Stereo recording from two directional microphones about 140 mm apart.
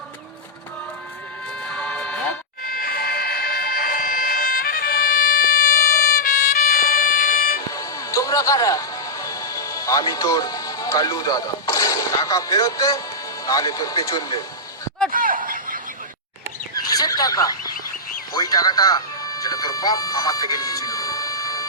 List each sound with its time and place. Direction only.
1.6 s music: 5° left (ahead or behind)
2.6 s a sound: 90° left
7.7 s music: 25° left (ahead or behind)
13.4 s speech: 25° left (ahead or behind)
15.1 s snicker: 75° right (ahead or behind)
16.7 s a sound: 25° left (ahead or behind)
18.3 s music: 25° left (ahead or behind)